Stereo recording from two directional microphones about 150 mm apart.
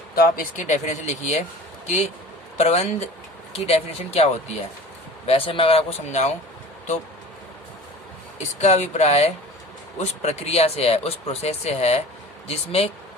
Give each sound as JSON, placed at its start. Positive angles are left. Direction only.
{"t": 0.3, "sound": "speech", "side_deg": 55}
{"t": 2.6, "sound": "speech", "side_deg": 45}
{"t": 8.4, "sound": "speech", "side_deg": 50}